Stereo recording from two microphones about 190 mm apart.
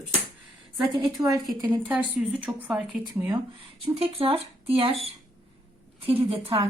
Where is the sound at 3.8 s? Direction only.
30° right (ahead or behind).